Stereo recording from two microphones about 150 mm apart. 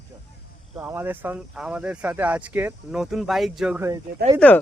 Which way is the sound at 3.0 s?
Centre (ahead or behind).